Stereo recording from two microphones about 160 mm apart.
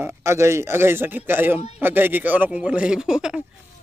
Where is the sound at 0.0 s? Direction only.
15° right (ahead or behind).